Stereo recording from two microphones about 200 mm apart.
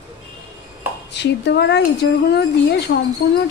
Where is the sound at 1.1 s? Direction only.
60° left (ahead or behind).